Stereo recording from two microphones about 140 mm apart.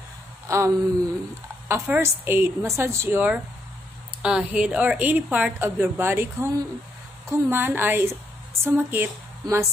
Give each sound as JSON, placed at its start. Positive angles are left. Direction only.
{"t": 0.5, "sound": "a woman's voice", "side_deg": -20}